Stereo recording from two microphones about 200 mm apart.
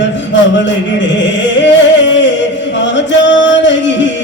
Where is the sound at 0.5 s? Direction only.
65° left (ahead or behind).